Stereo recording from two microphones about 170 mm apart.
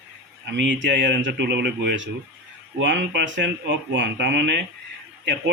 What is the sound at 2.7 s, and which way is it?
Speech, 90° right.